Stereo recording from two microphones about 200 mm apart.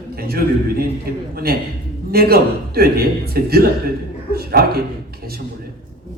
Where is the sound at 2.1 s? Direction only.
50° right (ahead or behind).